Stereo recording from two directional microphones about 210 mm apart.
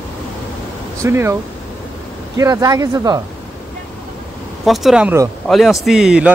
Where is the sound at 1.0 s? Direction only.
15° right (ahead or behind).